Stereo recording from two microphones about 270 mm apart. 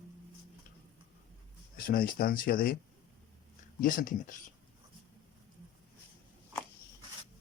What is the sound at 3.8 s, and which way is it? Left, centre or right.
Speech, left.